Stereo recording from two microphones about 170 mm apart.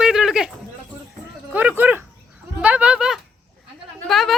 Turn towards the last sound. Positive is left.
turn(degrees=0)  # may be behind; listen again after turning